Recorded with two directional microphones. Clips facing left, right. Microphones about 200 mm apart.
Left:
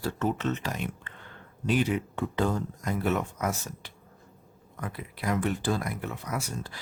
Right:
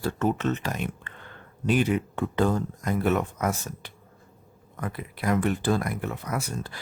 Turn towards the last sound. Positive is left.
turn(degrees=-55)  # may be behind; listen again after turning